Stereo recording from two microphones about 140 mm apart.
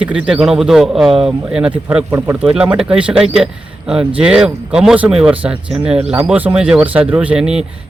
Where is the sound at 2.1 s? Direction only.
15° right (ahead or behind).